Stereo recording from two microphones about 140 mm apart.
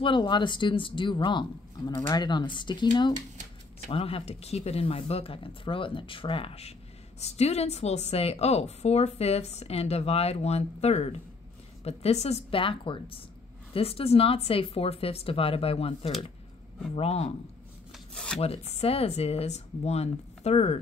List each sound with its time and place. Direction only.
0.0 s speech: 35° left (ahead or behind)
3.9 s a woman's voice: 45° left (ahead or behind)
17.9 s rub: 5° left (ahead or behind)
18.4 s a woman's voice: 45° left (ahead or behind)